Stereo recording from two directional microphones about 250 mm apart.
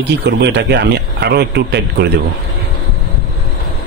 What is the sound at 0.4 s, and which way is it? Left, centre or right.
Speech, right.